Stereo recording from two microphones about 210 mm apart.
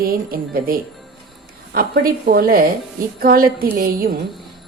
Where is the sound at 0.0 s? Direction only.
45° right (ahead or behind).